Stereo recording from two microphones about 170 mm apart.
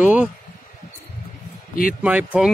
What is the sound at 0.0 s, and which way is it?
Speech, 10° right (ahead or behind).